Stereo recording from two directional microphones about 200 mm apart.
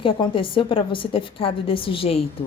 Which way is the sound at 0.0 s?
25° left (ahead or behind).